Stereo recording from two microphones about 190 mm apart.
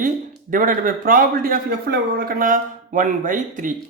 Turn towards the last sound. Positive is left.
turn(degrees=-45)  # may be behind; listen again after turning